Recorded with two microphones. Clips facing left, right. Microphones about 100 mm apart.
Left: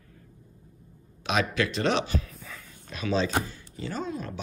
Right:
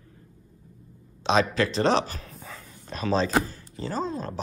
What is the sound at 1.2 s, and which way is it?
Speech, 30° right (ahead or behind).